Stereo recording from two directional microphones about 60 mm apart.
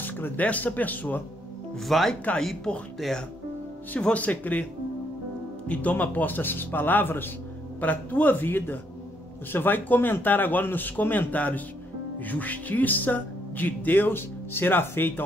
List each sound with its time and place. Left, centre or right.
0.0 s speech: left
1.8 s speech: centre
2.3 s speech: centre
4.0 s speech: left
5.7 s speech: left